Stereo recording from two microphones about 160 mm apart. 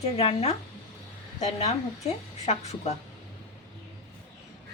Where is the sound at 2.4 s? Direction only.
45° left (ahead or behind).